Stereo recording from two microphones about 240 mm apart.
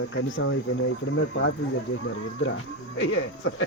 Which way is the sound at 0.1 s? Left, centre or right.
Left.